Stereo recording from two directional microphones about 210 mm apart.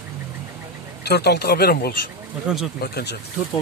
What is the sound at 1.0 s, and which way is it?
Speech, 50° left (ahead or behind).